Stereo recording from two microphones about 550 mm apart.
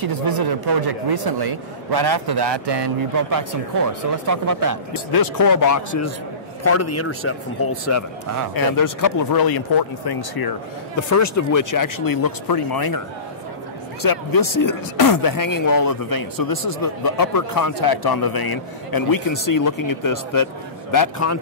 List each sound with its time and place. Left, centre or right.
0.0 s speech: right
4.9 s a man's voice: left
8.5 s speech: left
11.1 s speech: left
14.0 s speech: left